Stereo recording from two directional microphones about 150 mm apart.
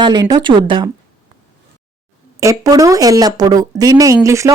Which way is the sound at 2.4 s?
20° right (ahead or behind).